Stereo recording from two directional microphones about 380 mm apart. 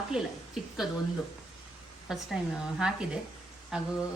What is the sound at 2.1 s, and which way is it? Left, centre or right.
Speech, centre.